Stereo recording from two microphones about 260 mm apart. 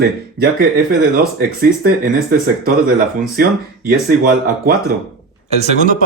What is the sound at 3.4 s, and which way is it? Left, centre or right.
Speech, right.